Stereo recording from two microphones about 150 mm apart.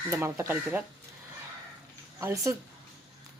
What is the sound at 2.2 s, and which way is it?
Speech, 20° right (ahead or behind).